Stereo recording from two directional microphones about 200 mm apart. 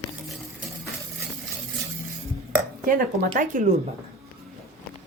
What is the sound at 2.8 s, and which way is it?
Speech, 45° right (ahead or behind).